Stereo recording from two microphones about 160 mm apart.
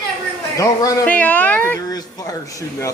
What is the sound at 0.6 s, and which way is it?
Speech, 20° left (ahead or behind).